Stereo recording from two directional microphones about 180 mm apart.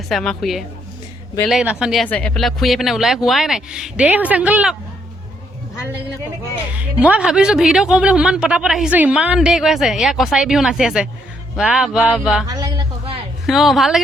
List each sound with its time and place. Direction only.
0.1 s speech: centre (ahead or behind)
6.7 s speech: 5° right (ahead or behind)
12.5 s a sound: 25° right (ahead or behind)
13.5 s speech: centre (ahead or behind)